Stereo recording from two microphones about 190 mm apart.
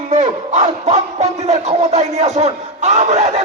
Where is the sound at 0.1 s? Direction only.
40° right (ahead or behind).